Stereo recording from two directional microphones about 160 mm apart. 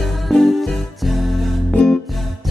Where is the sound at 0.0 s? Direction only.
Centre (ahead or behind).